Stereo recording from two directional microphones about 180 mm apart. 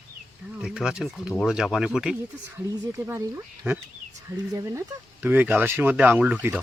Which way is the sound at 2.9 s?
15° right (ahead or behind).